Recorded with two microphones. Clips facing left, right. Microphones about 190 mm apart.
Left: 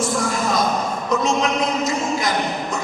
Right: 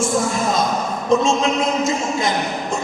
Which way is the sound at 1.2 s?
25° right (ahead or behind).